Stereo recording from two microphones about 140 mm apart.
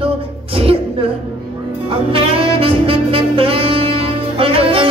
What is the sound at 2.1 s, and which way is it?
Saxophone, 40° right (ahead or behind).